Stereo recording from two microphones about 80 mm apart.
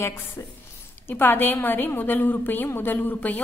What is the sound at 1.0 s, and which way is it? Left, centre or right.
A woman's voice, left.